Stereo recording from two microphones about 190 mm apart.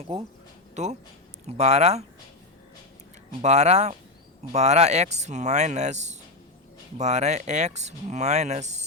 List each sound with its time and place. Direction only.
0.8 s speech: 35° right (ahead or behind)
3.4 s speech: 35° right (ahead or behind)